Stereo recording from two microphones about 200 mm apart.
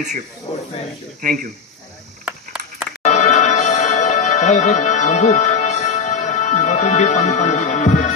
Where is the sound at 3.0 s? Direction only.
35° left (ahead or behind).